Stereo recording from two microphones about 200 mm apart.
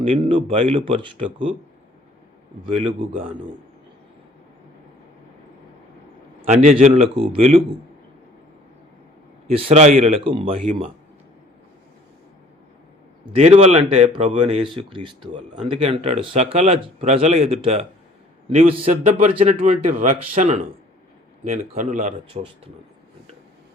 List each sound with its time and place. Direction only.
0.0 s speech: 25° right (ahead or behind)
2.6 s speech: 25° right (ahead or behind)
6.5 s a man's voice: 35° right (ahead or behind)
9.6 s speech: 30° right (ahead or behind)
13.3 s a man's voice: 35° right (ahead or behind)